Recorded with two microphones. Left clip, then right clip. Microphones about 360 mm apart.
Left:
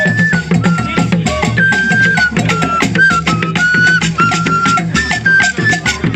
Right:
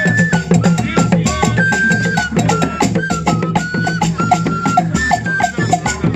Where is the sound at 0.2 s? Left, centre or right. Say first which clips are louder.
Left 2 dB; right.